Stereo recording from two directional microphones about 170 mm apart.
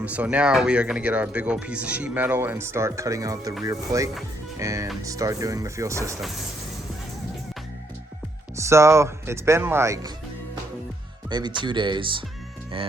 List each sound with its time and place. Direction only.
0.0 s speech: 10° right (ahead or behind)
8.5 s speech: 15° right (ahead or behind)
11.3 s speech: 25° right (ahead or behind)